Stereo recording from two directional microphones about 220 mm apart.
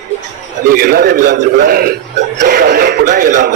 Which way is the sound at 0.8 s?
45° right (ahead or behind).